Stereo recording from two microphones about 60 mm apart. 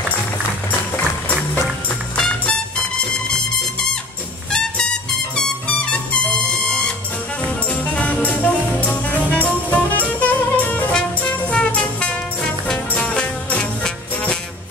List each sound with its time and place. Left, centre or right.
2.1 s music: centre
4.5 s music: centre
10.9 s music: centre